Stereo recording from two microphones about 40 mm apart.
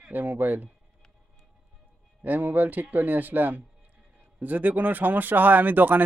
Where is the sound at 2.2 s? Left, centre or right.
Right.